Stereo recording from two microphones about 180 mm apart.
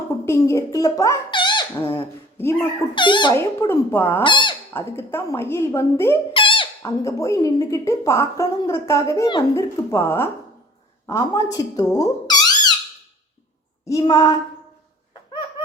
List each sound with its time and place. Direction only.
0.3 s a child's voice: 15° left (ahead or behind)
1.7 s speech: 15° left (ahead or behind)
2.9 s speech: 25° left (ahead or behind)
3.3 s speech: 15° left (ahead or behind)
4.2 s speech: 25° left (ahead or behind)
4.7 s speech: 15° left (ahead or behind)
6.3 s a sound: 30° left (ahead or behind)
7.0 s a woman's voice: 15° left (ahead or behind)
11.5 s squeak: 20° left (ahead or behind)
14.0 s speech: 20° left (ahead or behind)